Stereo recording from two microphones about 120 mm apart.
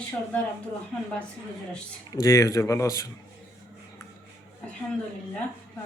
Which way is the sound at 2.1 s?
30° left (ahead or behind).